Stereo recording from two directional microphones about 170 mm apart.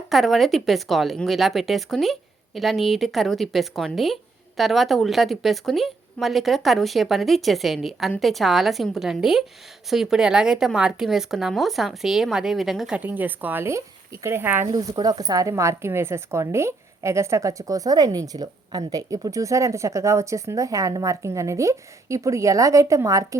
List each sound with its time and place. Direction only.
0.1 s speech: centre (ahead or behind)
14.7 s speech: 25° right (ahead or behind)